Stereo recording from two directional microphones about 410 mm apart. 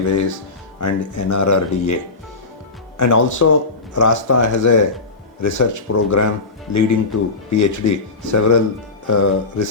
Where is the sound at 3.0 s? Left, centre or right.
Left.